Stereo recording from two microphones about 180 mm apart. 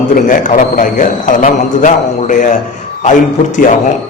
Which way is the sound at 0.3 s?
45° left (ahead or behind).